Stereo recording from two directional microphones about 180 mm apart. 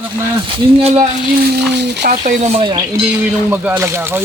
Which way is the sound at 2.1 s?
45° right (ahead or behind).